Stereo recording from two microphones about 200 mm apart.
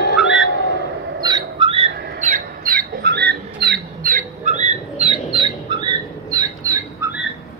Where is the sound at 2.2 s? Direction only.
40° right (ahead or behind); by 5.8 s 25° right (ahead or behind).